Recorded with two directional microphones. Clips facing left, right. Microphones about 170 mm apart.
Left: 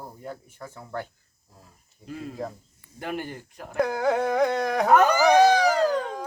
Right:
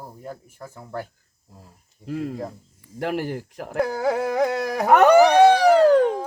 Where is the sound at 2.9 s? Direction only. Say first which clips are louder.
Right 7 dB; 80° right.